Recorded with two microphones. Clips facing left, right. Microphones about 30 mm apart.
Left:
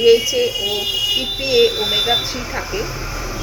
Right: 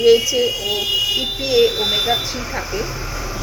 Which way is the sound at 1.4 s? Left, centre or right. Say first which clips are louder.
Left 1 dB; centre.